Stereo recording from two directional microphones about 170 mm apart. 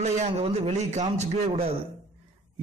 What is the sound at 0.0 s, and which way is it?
Speech, 40° right (ahead or behind).